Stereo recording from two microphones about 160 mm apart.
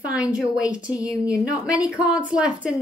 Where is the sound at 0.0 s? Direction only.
5° right (ahead or behind).